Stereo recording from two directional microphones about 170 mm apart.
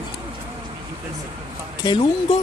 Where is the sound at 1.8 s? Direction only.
25° left (ahead or behind).